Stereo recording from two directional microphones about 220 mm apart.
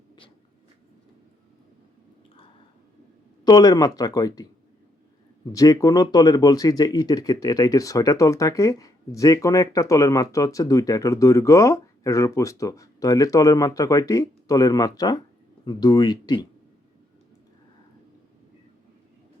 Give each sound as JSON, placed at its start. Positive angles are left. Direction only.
{"t": 3.4, "sound": "speech", "side_deg": 15}
{"t": 5.5, "sound": "speech", "side_deg": 15}